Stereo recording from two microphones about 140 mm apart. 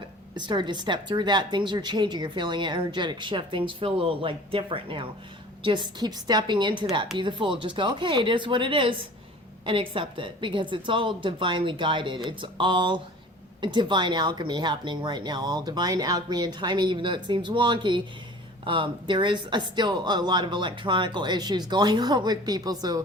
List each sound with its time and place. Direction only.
0.3 s a woman's voice: 35° right (ahead or behind)